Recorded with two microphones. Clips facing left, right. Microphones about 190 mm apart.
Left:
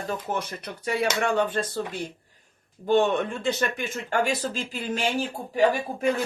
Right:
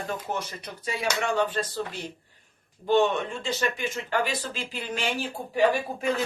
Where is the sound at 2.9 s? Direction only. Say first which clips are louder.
Left 1 dB; 50° left (ahead or behind).